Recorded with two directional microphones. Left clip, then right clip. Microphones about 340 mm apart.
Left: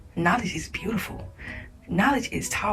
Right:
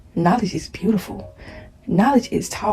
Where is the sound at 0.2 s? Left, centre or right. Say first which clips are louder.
Right 4 dB; centre.